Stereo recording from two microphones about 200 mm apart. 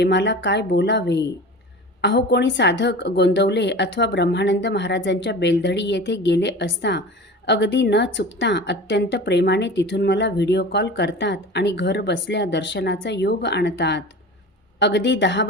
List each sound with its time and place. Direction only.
0.0 s a woman's voice: 60° left (ahead or behind)